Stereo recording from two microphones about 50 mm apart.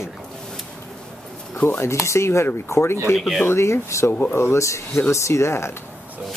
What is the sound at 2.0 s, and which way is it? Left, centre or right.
Speech, left.